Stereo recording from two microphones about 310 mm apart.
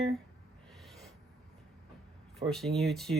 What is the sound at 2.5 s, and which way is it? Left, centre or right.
Speech, centre.